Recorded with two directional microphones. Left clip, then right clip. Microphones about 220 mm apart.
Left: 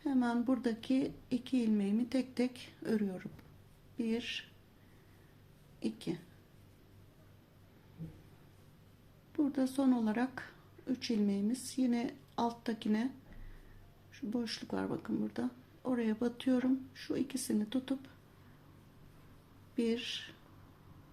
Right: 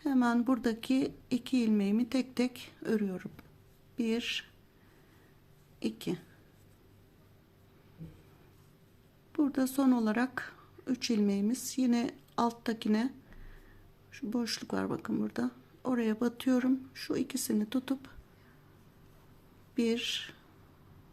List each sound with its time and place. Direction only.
0.0 s speech: 25° right (ahead or behind)
5.8 s speech: 25° right (ahead or behind)
9.3 s speech: 25° right (ahead or behind)
14.1 s speech: 25° right (ahead or behind)
19.7 s speech: 25° right (ahead or behind)